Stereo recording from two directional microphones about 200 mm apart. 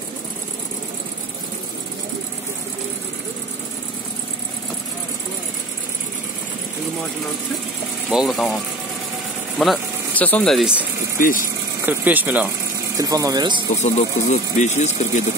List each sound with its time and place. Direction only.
8.1 s speech: centre (ahead or behind)
9.6 s speech: 5° left (ahead or behind)
11.1 s speech: 45° left (ahead or behind)
11.8 s speech: 10° right (ahead or behind)
13.8 s speech: 35° left (ahead or behind)